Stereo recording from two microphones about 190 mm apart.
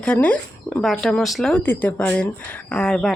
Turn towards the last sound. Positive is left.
turn(degrees=5)  # may be behind; listen again after turning